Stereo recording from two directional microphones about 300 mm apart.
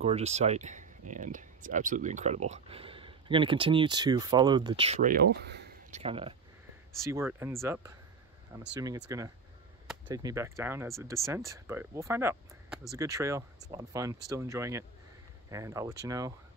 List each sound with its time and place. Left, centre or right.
0.0 s speech: right
5.9 s speech: centre